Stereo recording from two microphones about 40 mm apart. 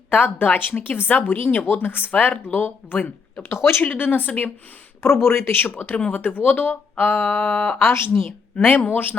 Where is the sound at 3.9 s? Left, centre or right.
Left.